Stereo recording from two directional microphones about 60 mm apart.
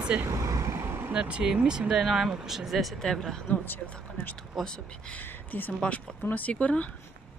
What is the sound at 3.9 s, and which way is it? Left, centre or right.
Speech, left.